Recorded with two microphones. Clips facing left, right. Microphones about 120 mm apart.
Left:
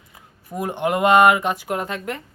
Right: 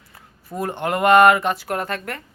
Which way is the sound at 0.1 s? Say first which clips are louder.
Even; 15° left (ahead or behind).